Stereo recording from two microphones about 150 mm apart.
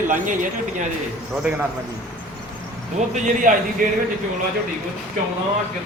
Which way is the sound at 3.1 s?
60° right (ahead or behind).